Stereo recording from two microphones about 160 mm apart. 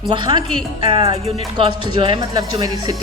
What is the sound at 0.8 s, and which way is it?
Music, 30° right (ahead or behind).